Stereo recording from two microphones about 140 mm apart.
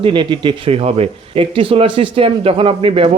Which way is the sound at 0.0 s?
35° right (ahead or behind).